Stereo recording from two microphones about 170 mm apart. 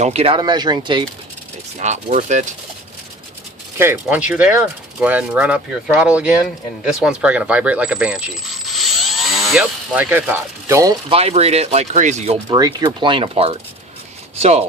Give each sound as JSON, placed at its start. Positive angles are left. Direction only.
{"t": 0.0, "sound": "speech", "side_deg": -35}
{"t": 1.8, "sound": "speech", "side_deg": -45}
{"t": 3.8, "sound": "speech", "side_deg": -10}
{"t": 7.0, "sound": "coin", "side_deg": -5}
{"t": 11.1, "sound": "speech", "side_deg": -35}
{"t": 12.5, "sound": "speech", "side_deg": -25}